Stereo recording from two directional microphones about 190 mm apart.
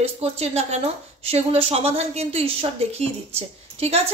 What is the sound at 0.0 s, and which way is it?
A woman's voice, 30° right (ahead or behind).